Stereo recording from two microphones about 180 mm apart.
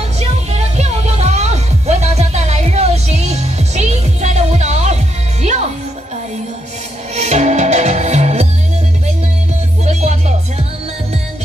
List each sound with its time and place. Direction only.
0.2 s music: 35° right (ahead or behind)
7.2 s music: 40° right (ahead or behind)
9.8 s music: 40° right (ahead or behind)